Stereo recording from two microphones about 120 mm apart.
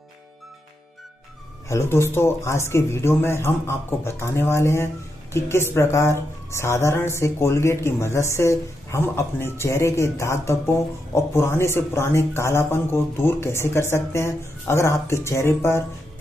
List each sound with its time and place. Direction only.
1.7 s speech: 20° left (ahead or behind)